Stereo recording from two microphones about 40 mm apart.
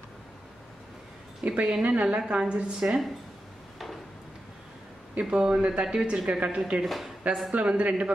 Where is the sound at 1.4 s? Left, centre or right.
Right.